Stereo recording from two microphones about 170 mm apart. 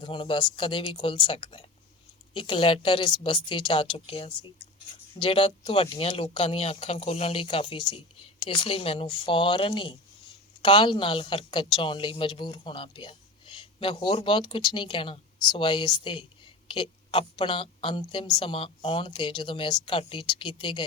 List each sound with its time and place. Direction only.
0.0 s a woman's voice: 30° left (ahead or behind)